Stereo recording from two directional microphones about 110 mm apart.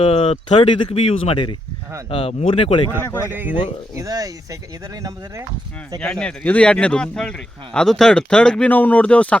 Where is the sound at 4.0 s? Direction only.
35° right (ahead or behind).